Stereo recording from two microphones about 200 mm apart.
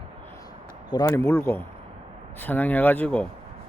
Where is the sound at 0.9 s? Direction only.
20° left (ahead or behind).